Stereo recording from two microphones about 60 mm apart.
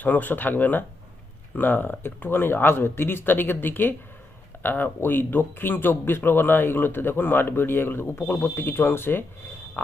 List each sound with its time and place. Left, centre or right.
0.0 s speech: left